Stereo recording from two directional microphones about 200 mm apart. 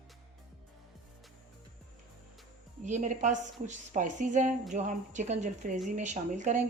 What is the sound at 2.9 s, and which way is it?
A woman's voice, 35° right (ahead or behind).